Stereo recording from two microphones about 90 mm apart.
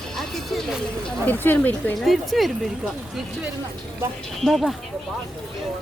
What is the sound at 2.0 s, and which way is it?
Speech, centre (ahead or behind).